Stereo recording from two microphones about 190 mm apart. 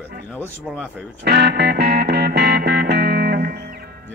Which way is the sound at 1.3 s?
60° right (ahead or behind).